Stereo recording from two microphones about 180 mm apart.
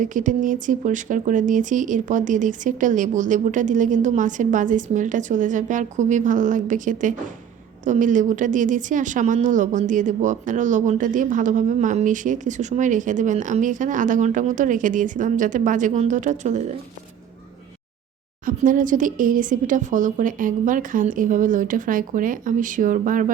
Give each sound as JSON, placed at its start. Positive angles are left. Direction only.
{"t": 0.0, "sound": "speech", "side_deg": -45}
{"t": 18.4, "sound": "speech", "side_deg": -50}